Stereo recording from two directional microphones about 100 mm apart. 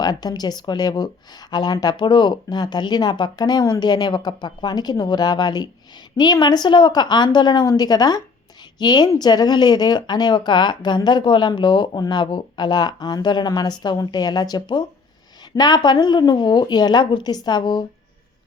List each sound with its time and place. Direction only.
0.0 s speech: 40° left (ahead or behind)